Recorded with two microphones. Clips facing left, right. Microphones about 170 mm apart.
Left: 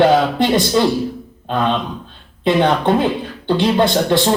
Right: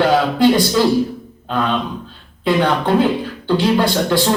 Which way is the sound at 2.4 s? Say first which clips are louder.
Left 2 dB; 25° left (ahead or behind).